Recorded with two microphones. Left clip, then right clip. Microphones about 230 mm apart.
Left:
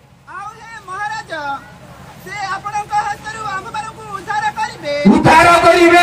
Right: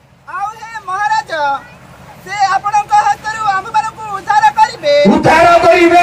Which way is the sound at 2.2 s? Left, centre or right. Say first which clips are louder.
Right 10 dB; right.